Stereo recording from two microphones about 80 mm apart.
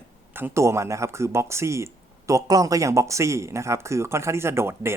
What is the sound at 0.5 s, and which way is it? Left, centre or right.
Speech, right.